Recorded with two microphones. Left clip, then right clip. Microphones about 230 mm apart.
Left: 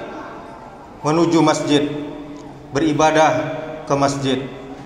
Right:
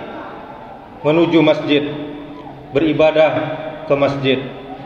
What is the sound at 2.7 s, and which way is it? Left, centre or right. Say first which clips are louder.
Speech: right 2 dB; centre.